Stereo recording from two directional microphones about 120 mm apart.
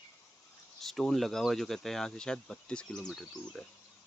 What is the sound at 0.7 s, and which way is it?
Speech, centre (ahead or behind).